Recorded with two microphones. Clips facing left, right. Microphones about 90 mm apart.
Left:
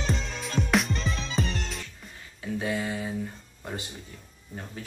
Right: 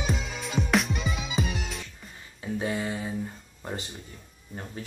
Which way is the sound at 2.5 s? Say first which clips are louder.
Even; 25° right (ahead or behind).